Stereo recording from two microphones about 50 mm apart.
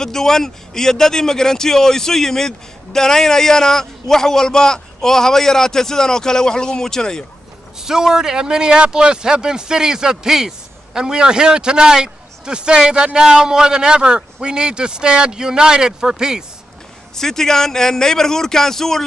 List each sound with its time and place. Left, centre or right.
0.0 s speech: centre
7.8 s a man's voice: centre
17.1 s speech: centre